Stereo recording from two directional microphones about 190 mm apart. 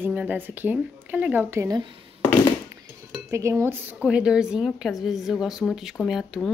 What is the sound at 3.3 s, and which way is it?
A woman's voice, 15° right (ahead or behind).